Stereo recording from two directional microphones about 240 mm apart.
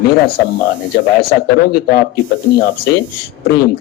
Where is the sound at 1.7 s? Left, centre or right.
Left.